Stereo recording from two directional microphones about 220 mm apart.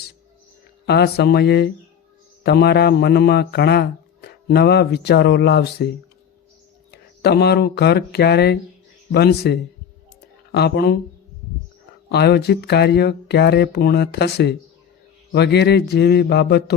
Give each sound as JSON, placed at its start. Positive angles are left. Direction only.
{"t": 0.9, "sound": "speech", "side_deg": 45}
{"t": 6.9, "sound": "speech", "side_deg": 45}
{"t": 12.0, "sound": "speech", "side_deg": 50}